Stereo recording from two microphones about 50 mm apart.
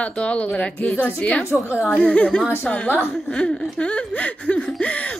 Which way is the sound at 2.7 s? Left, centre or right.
Left.